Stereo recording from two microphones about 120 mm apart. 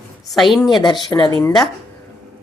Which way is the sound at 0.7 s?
40° left (ahead or behind).